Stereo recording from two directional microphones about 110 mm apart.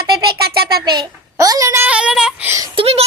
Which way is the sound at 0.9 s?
35° right (ahead or behind).